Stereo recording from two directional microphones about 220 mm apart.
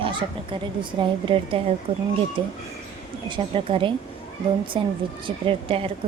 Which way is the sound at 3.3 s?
25° right (ahead or behind).